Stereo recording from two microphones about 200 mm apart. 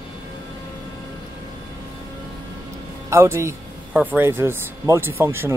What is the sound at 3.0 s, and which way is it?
Speech, 15° right (ahead or behind).